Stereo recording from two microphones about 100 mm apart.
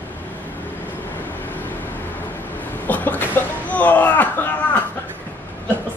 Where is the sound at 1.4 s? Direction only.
20° left (ahead or behind).